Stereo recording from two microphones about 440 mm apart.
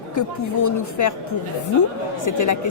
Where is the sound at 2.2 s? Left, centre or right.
Left.